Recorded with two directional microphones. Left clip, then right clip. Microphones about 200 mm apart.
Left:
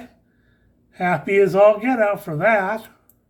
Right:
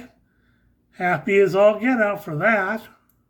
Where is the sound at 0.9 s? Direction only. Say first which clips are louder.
Left 1 dB; 15° right (ahead or behind).